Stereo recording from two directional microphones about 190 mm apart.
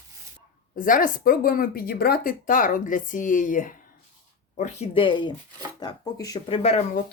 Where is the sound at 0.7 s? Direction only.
45° left (ahead or behind).